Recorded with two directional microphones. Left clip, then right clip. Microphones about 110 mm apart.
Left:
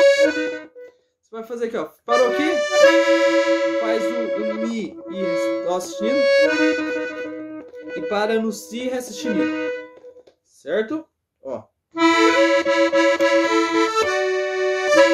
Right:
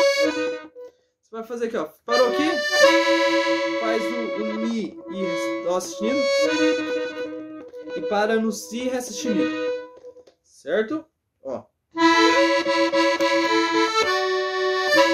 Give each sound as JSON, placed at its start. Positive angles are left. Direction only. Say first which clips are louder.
{"t": 0.0, "sound": "music", "louder": "left 5 dB", "side_deg": -20}
{"t": 1.3, "sound": "music", "louder": "left 1 dB", "side_deg": 0}
{"t": 2.5, "sound": "music", "louder": "left 3 dB", "side_deg": -30}
{"t": 4.6, "sound": "music", "louder": "left 1 dB", "side_deg": 5}
{"t": 5.3, "sound": "music", "louder": "left 5 dB", "side_deg": -25}
{"t": 5.7, "sound": "music", "louder": "left 2 dB", "side_deg": 0}
{"t": 6.1, "sound": "accordion", "louder": "left 5 dB", "side_deg": -25}
{"t": 8.1, "sound": "music", "louder": "left 1 dB", "side_deg": 5}
{"t": 10.6, "sound": "speech", "louder": "left 1 dB", "side_deg": 0}
{"t": 11.4, "sound": "music", "louder": "left 1 dB", "side_deg": -5}
{"t": 11.9, "sound": "accordion", "louder": "left 1 dB", "side_deg": -20}